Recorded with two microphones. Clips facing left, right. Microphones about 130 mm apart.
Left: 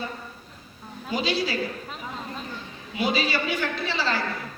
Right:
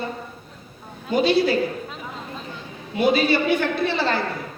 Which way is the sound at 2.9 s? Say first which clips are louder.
Right 7 dB; 55° right (ahead or behind).